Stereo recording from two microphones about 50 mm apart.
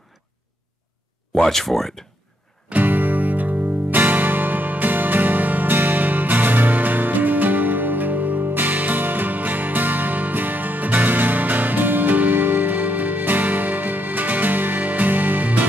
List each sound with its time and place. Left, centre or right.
1.3 s speech: centre
2.7 s music: right